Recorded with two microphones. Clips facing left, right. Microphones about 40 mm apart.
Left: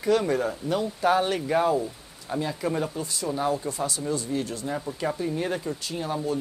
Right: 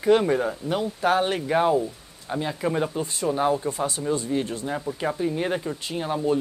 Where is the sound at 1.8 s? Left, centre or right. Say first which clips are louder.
Right 3 dB; centre.